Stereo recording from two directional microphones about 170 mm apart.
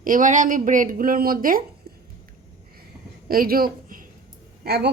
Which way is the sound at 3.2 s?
60° right (ahead or behind).